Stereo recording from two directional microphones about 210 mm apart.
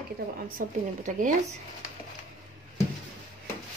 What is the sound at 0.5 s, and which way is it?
Speech, 35° right (ahead or behind).